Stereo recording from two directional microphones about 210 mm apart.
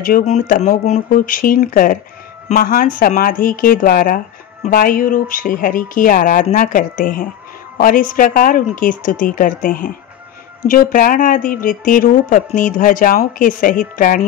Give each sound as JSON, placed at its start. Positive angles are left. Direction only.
{"t": 0.0, "sound": "speech", "side_deg": 40}